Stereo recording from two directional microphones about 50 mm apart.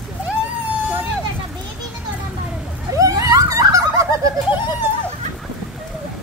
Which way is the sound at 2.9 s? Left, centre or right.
Right.